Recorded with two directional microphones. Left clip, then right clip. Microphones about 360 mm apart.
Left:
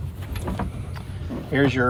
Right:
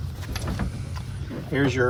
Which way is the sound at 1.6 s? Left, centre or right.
Left.